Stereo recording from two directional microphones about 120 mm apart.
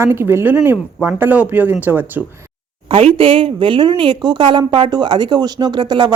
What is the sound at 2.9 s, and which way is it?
A woman's voice, 50° right (ahead or behind).